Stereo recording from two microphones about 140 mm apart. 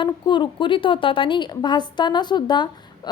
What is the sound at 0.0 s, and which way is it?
A woman's voice, 35° left (ahead or behind).